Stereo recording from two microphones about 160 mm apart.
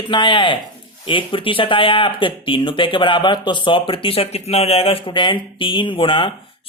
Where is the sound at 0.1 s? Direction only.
30° left (ahead or behind).